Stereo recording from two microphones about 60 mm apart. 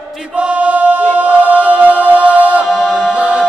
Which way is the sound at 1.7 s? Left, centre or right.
Right.